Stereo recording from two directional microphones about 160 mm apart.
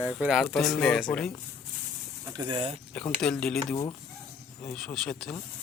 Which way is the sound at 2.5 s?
35° right (ahead or behind).